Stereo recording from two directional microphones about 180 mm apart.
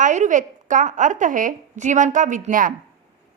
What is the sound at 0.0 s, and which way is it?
A woman's voice, 45° right (ahead or behind).